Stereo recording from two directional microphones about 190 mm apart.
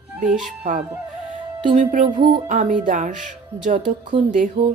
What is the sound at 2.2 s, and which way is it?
Music, 25° right (ahead or behind).